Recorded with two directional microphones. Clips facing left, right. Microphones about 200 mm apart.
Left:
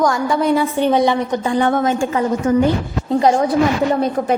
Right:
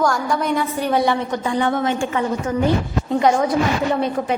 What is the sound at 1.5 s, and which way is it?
A woman's voice, 50° left (ahead or behind).